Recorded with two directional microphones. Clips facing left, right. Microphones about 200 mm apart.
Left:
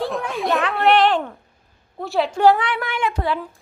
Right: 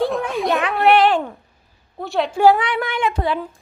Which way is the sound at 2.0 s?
Centre (ahead or behind).